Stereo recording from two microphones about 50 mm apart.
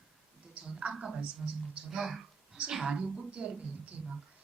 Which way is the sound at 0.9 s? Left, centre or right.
Centre.